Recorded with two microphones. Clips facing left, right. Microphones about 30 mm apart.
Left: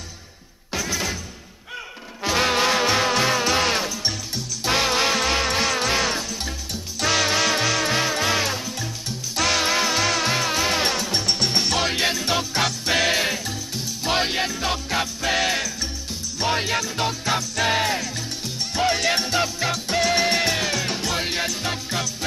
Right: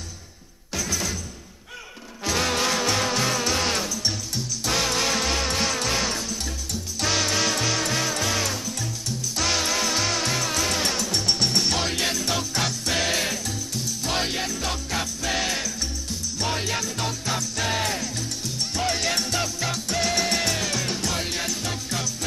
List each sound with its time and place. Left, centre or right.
0.7 s music: left
2.2 s music: left
7.0 s music: centre; by 9.9 s left
9.9 s music: centre
10.2 s music: left
19.0 s music: left